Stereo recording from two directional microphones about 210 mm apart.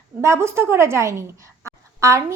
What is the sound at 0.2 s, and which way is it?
A woman's voice, 15° right (ahead or behind).